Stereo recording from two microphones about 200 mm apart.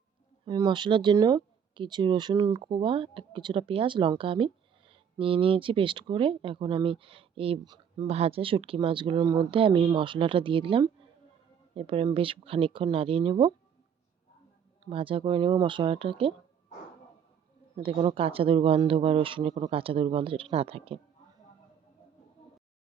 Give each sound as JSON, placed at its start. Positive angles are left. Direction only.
{"t": 0.4, "sound": "speech", "side_deg": -25}
{"t": 14.8, "sound": "speech", "side_deg": -25}
{"t": 17.7, "sound": "speech", "side_deg": -25}